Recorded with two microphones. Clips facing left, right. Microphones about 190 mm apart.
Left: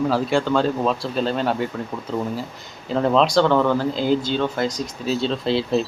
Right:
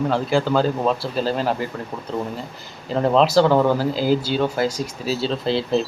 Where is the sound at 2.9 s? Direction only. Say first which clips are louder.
Right 1 dB; 5° right (ahead or behind).